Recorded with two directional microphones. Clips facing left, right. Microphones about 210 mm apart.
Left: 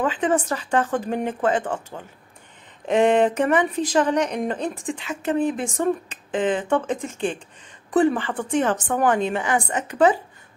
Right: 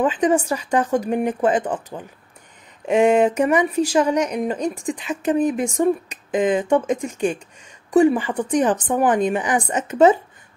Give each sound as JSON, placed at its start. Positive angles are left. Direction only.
{"t": 0.0, "sound": "a woman's voice", "side_deg": -15}